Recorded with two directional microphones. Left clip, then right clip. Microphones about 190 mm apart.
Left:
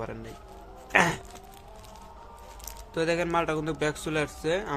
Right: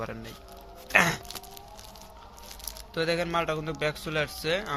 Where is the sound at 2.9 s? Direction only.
20° left (ahead or behind).